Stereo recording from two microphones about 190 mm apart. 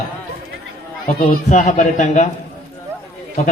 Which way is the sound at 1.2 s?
40° left (ahead or behind).